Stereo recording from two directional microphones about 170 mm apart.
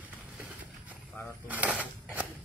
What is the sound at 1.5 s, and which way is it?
Mechanisms, 10° right (ahead or behind).